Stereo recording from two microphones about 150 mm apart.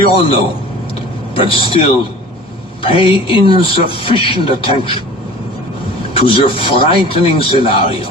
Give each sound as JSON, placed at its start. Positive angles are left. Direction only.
{"t": 0.1, "sound": "speech", "side_deg": 40}
{"t": 6.1, "sound": "speech", "side_deg": 40}